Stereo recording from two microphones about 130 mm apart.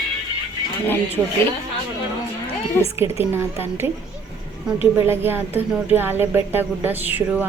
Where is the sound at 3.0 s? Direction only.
20° right (ahead or behind).